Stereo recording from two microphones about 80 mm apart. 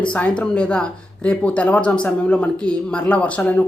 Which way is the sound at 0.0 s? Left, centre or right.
Centre.